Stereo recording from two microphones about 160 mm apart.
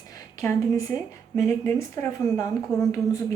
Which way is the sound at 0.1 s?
20° left (ahead or behind).